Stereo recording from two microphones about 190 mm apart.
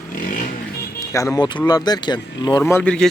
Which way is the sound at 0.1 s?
45° left (ahead or behind).